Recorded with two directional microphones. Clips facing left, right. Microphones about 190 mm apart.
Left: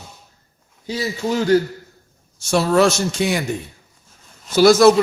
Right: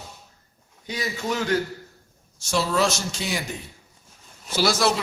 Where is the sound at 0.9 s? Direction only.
30° left (ahead or behind).